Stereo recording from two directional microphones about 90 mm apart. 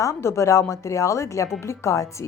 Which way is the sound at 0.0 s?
30° left (ahead or behind).